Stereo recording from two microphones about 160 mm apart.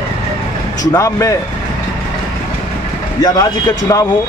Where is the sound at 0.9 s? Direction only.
20° left (ahead or behind).